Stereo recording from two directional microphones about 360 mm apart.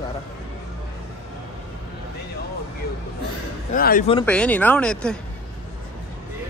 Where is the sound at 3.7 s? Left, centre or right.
Left.